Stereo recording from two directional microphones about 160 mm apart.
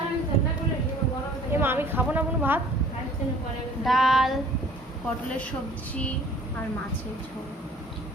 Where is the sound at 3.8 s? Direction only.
Centre (ahead or behind).